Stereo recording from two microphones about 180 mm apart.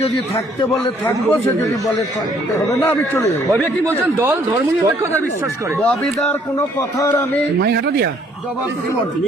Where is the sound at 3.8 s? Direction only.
15° right (ahead or behind).